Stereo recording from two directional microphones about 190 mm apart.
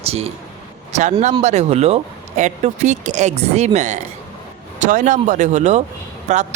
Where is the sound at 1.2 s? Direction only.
35° right (ahead or behind).